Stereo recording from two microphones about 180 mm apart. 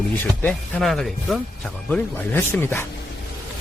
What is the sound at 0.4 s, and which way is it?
Speech, centre (ahead or behind).